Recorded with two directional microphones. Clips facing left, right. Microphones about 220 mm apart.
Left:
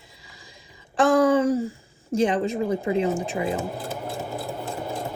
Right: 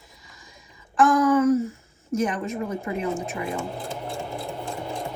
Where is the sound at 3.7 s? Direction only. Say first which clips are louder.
Left 1 dB; centre (ahead or behind).